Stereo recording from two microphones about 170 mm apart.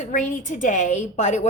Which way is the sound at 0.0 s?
45° left (ahead or behind).